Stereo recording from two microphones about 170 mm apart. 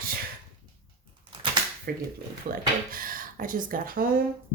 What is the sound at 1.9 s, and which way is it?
Speech, 65° right (ahead or behind).